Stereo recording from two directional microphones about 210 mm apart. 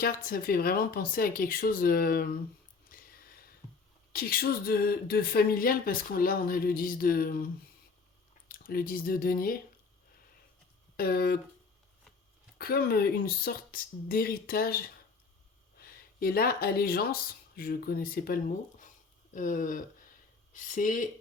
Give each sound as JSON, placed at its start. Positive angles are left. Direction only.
{"t": 0.0, "sound": "a woman's voice", "side_deg": 45}
{"t": 2.9, "sound": "a sound", "side_deg": 40}
{"t": 4.1, "sound": "a woman's voice", "side_deg": 45}
{"t": 10.9, "sound": "speech", "side_deg": 45}
{"t": 12.5, "sound": "a woman's voice", "side_deg": 45}